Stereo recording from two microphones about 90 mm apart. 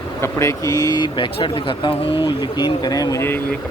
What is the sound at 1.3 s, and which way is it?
Speech, 75° left (ahead or behind).